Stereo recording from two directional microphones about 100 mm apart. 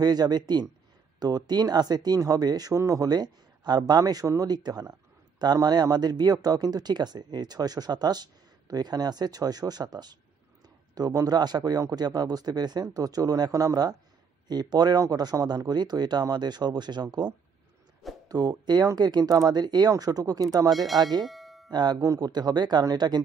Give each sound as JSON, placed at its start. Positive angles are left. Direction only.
{"t": 0.0, "sound": "a man's voice", "side_deg": -40}
{"t": 18.3, "sound": "speech", "side_deg": -40}
{"t": 20.7, "sound": "speech", "side_deg": 0}
{"t": 21.0, "sound": "a man's voice", "side_deg": -45}
{"t": 21.3, "sound": "music", "side_deg": 0}
{"t": 21.6, "sound": "a man's voice", "side_deg": -45}